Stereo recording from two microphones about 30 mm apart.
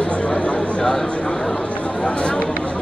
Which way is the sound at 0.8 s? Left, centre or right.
Centre.